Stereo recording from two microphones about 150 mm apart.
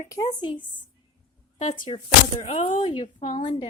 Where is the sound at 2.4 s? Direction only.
40° left (ahead or behind).